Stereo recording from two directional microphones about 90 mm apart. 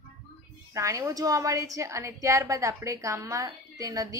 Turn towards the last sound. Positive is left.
turn(degrees=-40)  # may be behind; listen again after turning